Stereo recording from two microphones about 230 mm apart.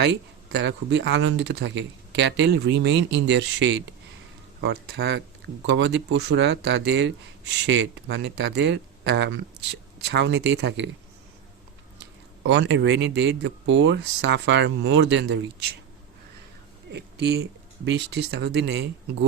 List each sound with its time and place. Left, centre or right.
0.0 s speech: right
11.9 s speech: right
16.9 s speech: right